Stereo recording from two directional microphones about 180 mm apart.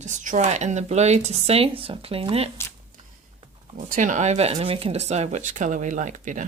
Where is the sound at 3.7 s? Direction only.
45° right (ahead or behind).